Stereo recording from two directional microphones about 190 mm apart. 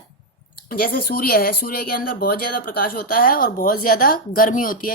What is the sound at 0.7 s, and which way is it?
A woman's voice, 50° left (ahead or behind).